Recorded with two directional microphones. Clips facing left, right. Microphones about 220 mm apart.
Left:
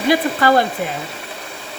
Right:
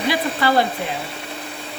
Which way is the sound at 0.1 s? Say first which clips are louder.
Left 6 dB; 50° left (ahead or behind).